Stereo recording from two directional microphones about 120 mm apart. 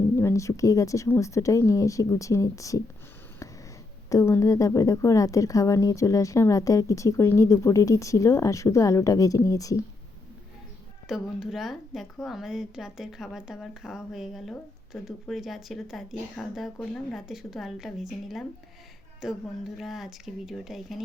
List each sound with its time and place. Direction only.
0.2 s a woman's voice: 25° left (ahead or behind)
4.1 s a woman's voice: 25° left (ahead or behind)
11.1 s a woman's voice: centre (ahead or behind)